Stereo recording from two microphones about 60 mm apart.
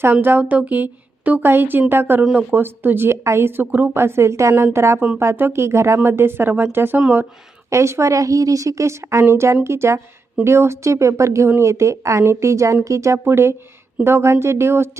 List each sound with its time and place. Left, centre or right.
0.1 s a woman's voice: right
4.0 s a woman's voice: right
7.7 s a woman's voice: right
11.4 s a woman's voice: right
11.7 s a woman's voice: right
13.2 s speech: right